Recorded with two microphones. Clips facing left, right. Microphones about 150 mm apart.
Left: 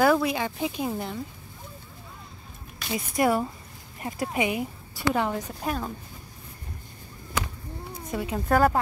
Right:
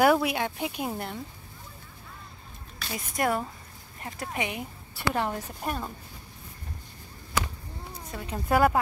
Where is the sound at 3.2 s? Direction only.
5° left (ahead or behind).